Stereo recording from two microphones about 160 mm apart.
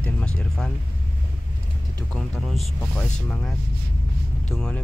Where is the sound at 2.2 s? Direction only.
5° left (ahead or behind).